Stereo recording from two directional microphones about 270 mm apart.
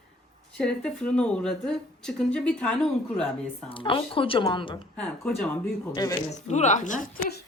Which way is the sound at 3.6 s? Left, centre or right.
Centre.